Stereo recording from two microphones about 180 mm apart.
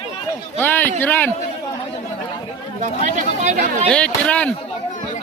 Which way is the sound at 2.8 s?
40° right (ahead or behind).